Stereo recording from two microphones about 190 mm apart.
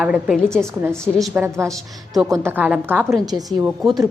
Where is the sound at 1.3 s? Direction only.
15° right (ahead or behind).